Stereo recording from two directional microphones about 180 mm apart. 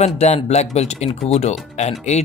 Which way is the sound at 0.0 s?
35° left (ahead or behind).